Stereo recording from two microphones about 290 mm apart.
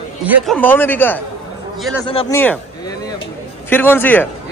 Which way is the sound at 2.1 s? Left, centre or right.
Centre.